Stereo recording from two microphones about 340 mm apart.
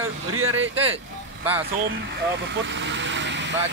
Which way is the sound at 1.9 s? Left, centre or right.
Right.